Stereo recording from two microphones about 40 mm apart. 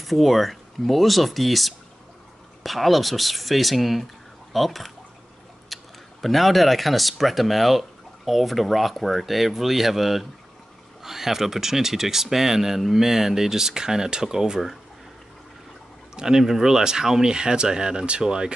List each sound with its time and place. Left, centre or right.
0.0 s speech: centre
5.7 s chewing: centre
6.2 s speech: centre
16.2 s speech: centre